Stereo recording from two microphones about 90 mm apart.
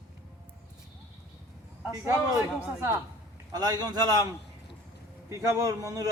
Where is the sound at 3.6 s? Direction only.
45° right (ahead or behind).